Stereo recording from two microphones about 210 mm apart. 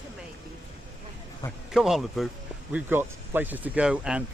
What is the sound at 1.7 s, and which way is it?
Speech, centre (ahead or behind).